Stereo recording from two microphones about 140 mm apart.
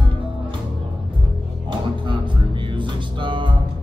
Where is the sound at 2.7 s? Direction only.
35° right (ahead or behind).